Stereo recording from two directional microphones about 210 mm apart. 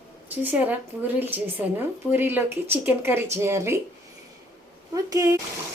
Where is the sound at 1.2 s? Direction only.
10° right (ahead or behind).